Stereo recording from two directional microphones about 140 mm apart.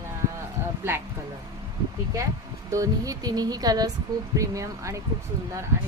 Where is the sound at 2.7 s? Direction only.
25° right (ahead or behind).